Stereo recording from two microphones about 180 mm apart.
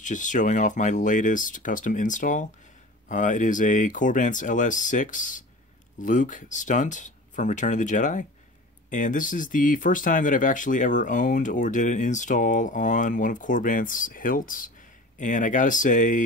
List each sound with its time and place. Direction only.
0.0 s speech: 45° left (ahead or behind)